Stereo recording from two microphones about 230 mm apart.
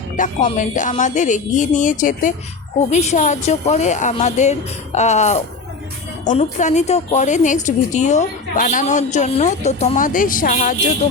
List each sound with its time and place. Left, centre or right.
0.2 s a woman's voice: left